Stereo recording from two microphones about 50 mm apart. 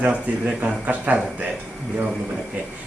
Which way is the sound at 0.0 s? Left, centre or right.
Right.